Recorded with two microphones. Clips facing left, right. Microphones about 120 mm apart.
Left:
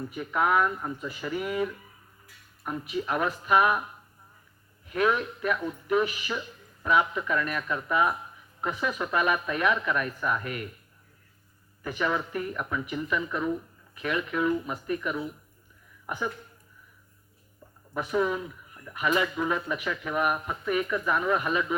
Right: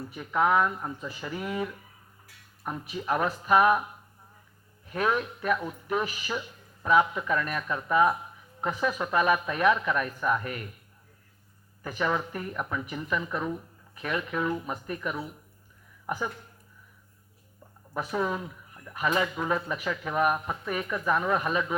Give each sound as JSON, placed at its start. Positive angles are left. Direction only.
{"t": 0.3, "sound": "speech", "side_deg": -25}
{"t": 2.6, "sound": "a man's voice", "side_deg": -30}
{"t": 4.9, "sound": "a man's voice", "side_deg": -35}
{"t": 11.8, "sound": "a man's voice", "side_deg": -35}
{"t": 17.9, "sound": "a man's voice", "side_deg": -30}